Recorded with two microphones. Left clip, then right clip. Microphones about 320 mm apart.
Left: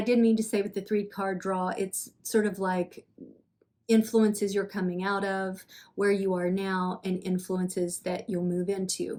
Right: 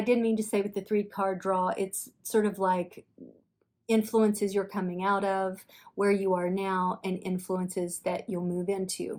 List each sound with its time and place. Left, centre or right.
0.0 s speech: centre
3.8 s speech: centre